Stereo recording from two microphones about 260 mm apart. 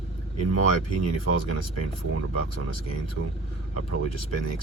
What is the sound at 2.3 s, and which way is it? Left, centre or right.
Speech, left.